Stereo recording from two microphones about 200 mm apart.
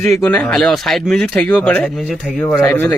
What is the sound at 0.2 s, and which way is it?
Speech, 5° left (ahead or behind).